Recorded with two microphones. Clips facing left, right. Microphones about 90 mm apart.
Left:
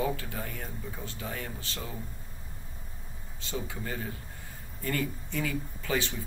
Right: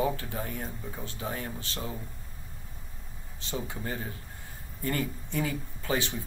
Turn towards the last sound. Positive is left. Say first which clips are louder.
# right 1 dB
turn(degrees=-25)  # may be behind; listen again after turning